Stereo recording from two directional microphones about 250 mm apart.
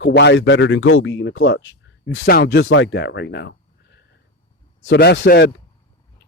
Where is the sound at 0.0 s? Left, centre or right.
Left.